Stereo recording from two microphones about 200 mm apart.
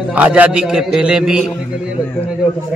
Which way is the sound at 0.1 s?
5° right (ahead or behind).